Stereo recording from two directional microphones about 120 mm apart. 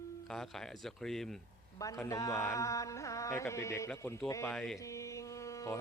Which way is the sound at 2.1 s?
25° left (ahead or behind).